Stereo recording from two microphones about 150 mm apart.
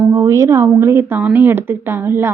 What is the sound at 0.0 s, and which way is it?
Speech, 15° right (ahead or behind).